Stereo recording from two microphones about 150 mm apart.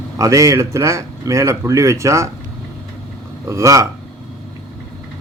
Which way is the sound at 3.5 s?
20° right (ahead or behind).